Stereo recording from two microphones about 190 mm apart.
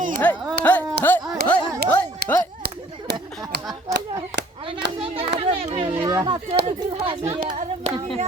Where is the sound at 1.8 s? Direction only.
55° right (ahead or behind).